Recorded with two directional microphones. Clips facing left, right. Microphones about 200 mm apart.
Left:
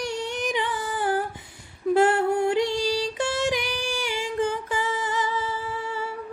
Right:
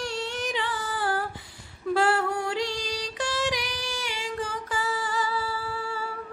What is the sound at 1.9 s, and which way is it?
Female singing, 25° left (ahead or behind).